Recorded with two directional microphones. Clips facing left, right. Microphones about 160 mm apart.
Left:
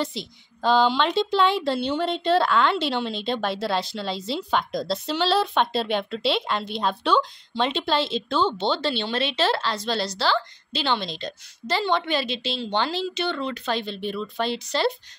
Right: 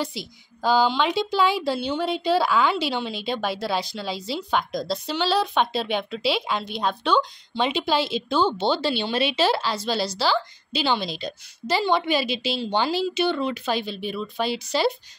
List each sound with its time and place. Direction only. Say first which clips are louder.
0.0 s speech: left 1 dB; 5° right (ahead or behind)